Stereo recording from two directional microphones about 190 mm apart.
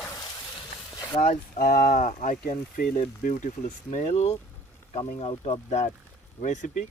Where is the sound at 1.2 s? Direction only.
50° left (ahead or behind).